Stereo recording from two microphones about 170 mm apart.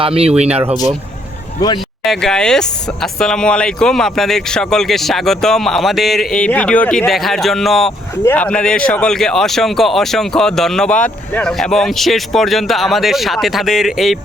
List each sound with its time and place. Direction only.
0.0 s speech: 35° right (ahead or behind)
1.6 s speech: 20° left (ahead or behind)
2.0 s speech: 5° left (ahead or behind)